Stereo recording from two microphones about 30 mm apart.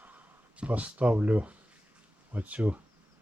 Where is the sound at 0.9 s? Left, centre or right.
Right.